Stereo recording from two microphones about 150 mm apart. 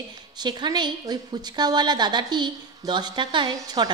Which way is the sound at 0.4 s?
30° right (ahead or behind).